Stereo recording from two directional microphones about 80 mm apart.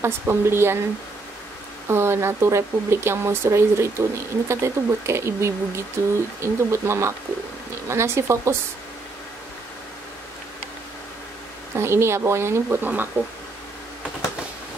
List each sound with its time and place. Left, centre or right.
0.0 s speech: right
1.9 s speech: right
11.7 s speech: right
12.6 s speech: right